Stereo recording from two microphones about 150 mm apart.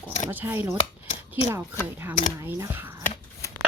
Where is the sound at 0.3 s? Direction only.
15° right (ahead or behind).